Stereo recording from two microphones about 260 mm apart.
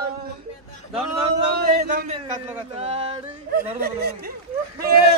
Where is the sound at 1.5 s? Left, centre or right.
Right.